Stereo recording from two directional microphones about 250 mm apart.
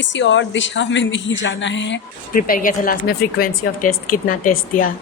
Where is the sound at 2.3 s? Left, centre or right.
Left.